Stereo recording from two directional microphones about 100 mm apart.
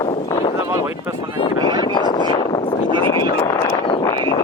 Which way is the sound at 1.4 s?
45° left (ahead or behind).